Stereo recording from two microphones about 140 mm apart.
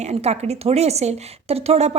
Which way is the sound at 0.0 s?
50° right (ahead or behind).